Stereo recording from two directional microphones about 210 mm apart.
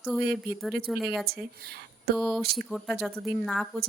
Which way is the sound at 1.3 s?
50° right (ahead or behind).